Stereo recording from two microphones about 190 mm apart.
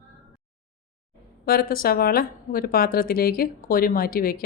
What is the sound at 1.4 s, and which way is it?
A woman's voice, 55° left (ahead or behind).